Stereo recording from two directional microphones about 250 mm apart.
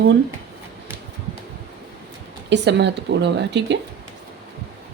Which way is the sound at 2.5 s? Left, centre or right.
Right.